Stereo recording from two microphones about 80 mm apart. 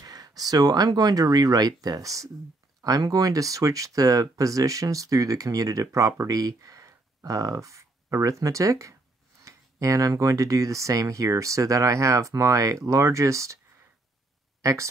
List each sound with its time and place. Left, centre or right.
0.0 s speech: right
14.6 s speech: right